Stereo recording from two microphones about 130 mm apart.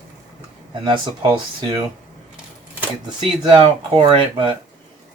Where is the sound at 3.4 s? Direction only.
35° right (ahead or behind).